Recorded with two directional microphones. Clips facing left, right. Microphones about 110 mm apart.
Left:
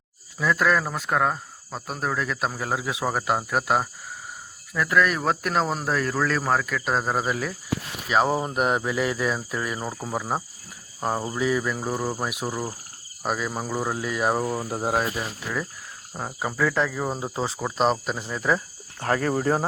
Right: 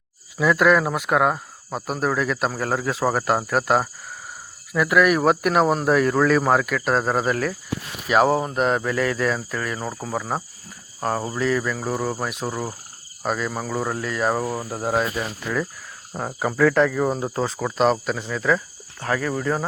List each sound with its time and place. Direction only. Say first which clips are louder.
0.3 s speech: right 5 dB; 5° right (ahead or behind)
8.2 s speech: right 5 dB; 5° right (ahead or behind)
8.4 s cricket: right 2 dB; 10° left (ahead or behind)
14.4 s speech: even; 5° right (ahead or behind)
14.7 s cricket: right 3 dB; 20° left (ahead or behind)
15.1 s cricket: right 4 dB; 10° left (ahead or behind)
16.1 s speech: right 5 dB; 5° right (ahead or behind)
18.3 s speech: right 2 dB; 25° left (ahead or behind)
19.0 s speech: left 1 dB; 40° left (ahead or behind)